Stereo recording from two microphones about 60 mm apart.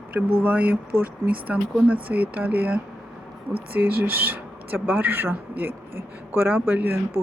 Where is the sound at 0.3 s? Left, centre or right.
Right.